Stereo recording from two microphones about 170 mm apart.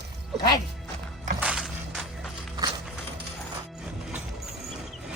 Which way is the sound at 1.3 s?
5° right (ahead or behind).